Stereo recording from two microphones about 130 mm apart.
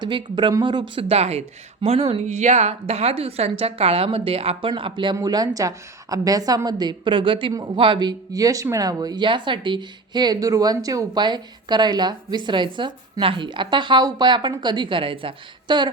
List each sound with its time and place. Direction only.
0.0 s speech: 35° right (ahead or behind)